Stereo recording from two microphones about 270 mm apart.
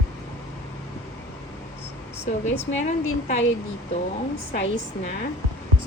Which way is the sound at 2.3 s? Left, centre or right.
Left.